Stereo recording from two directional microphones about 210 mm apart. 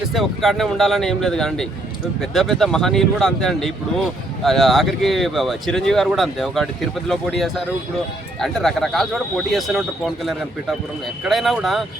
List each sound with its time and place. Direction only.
0.1 s a man's voice: centre (ahead or behind)